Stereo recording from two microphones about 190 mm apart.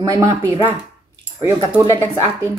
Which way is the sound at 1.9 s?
10° left (ahead or behind).